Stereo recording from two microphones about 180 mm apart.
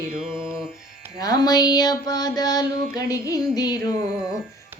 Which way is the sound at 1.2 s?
20° left (ahead or behind).